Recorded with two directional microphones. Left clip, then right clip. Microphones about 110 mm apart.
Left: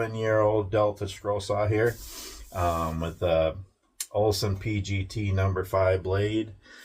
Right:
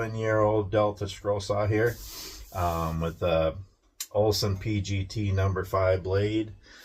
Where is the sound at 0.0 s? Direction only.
25° left (ahead or behind).